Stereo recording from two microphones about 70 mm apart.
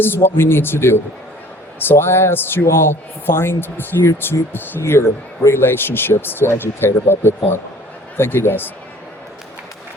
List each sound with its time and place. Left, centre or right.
0.0 s a man's voice: left
4.8 s speech: left
5.5 s a man's voice: left